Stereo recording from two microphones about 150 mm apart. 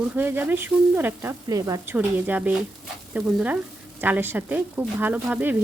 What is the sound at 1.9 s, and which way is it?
Speech, 10° right (ahead or behind).